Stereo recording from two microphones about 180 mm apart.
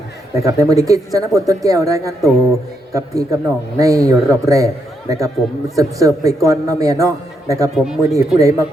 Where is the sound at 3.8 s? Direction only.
20° right (ahead or behind).